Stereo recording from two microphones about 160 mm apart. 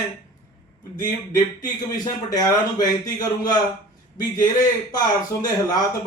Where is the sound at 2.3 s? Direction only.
25° left (ahead or behind).